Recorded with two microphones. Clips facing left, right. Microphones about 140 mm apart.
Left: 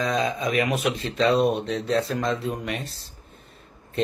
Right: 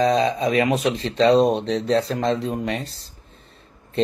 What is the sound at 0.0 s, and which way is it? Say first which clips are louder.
Speech: right 6 dB; 35° right (ahead or behind).